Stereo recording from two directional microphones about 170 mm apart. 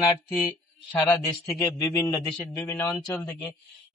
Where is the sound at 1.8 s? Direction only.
20° left (ahead or behind).